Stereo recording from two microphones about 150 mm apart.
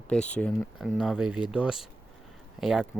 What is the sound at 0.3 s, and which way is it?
Speech, 5° left (ahead or behind).